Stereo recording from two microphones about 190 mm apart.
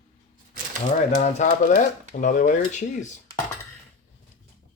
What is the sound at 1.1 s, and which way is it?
Speech, 40° left (ahead or behind).